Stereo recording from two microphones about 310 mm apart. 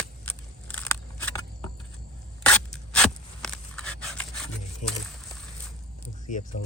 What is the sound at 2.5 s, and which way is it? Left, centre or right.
Zipper, centre.